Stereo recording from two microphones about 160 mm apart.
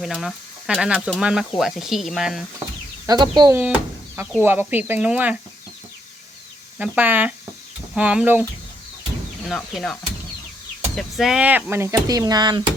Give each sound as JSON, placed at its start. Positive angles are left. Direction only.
{"t": 0.0, "sound": "speech", "side_deg": 0}
{"t": 3.1, "sound": "speech", "side_deg": -25}
{"t": 3.5, "sound": "speech", "side_deg": -10}
{"t": 6.7, "sound": "speech", "side_deg": -10}
{"t": 9.5, "sound": "speech", "side_deg": 0}